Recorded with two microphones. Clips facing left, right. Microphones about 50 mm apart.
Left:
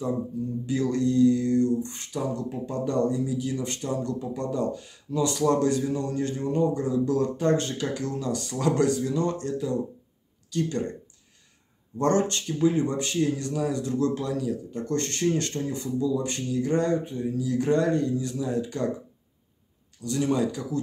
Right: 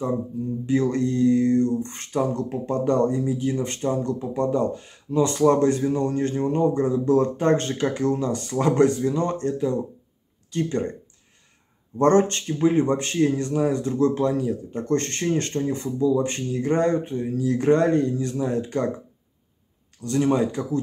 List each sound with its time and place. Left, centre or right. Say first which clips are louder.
0.7 s speech: right 3 dB; right
12.0 s speech: right 5 dB; right
20.0 s speech: right 4 dB; right